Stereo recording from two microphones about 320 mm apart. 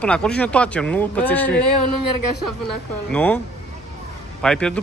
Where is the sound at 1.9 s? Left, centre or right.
Left.